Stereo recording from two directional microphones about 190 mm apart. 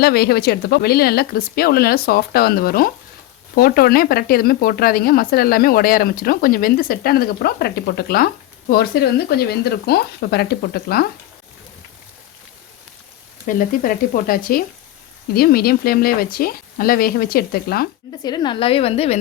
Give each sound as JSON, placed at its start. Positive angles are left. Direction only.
{"t": 0.0, "sound": "speech", "side_deg": 55}
{"t": 13.6, "sound": "speech", "side_deg": 45}
{"t": 18.2, "sound": "a woman's voice", "side_deg": 20}